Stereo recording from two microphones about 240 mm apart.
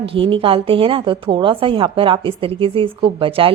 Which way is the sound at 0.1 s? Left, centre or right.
Right.